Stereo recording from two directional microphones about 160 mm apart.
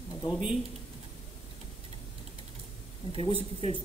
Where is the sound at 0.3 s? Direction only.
5° right (ahead or behind).